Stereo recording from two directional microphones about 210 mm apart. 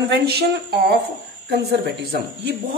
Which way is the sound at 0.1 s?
50° right (ahead or behind).